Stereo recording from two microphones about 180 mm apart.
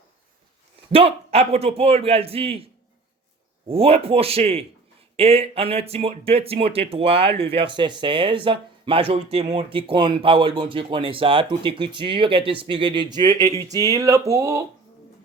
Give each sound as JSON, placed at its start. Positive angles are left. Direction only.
{"t": 0.9, "sound": "a man's voice", "side_deg": -30}
{"t": 3.7, "sound": "a man's voice", "side_deg": -30}